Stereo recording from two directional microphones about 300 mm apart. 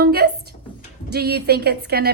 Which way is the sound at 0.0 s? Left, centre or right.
Right.